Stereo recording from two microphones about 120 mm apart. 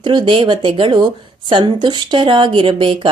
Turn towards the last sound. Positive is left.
turn(degrees=-45)  # may be behind; listen again after turning